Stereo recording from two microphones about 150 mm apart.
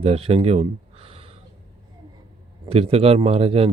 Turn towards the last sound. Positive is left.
turn(degrees=-40)  # may be behind; listen again after turning